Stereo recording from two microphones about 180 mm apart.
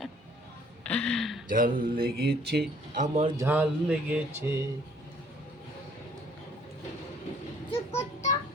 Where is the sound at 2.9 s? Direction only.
40° right (ahead or behind).